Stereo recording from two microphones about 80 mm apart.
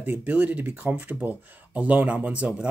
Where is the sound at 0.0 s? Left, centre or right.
Right.